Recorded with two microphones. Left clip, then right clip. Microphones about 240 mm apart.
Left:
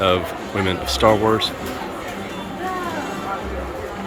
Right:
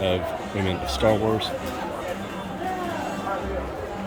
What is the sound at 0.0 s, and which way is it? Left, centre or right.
Speech, centre.